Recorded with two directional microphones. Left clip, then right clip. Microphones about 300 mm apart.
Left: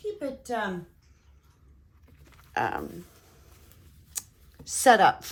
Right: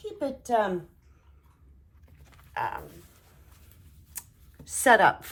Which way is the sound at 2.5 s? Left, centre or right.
Centre.